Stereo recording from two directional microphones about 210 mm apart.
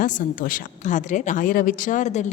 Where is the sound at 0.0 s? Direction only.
40° left (ahead or behind).